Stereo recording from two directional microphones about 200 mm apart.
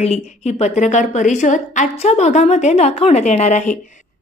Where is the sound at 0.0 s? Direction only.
30° left (ahead or behind).